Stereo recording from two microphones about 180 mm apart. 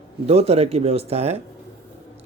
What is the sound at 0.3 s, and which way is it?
Speech, 35° right (ahead or behind).